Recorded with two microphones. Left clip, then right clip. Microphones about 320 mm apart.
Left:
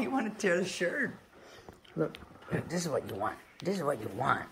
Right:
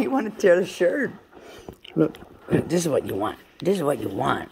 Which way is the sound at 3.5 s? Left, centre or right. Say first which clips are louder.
Right 12 dB; right.